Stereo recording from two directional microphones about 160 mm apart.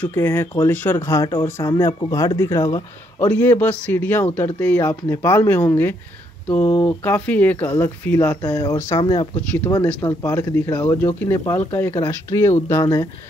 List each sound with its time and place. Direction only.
0.0 s speech: 15° left (ahead or behind)
9.0 s speech: 30° left (ahead or behind)
9.8 s speech: 5° left (ahead or behind); by 13.1 s 25° left (ahead or behind)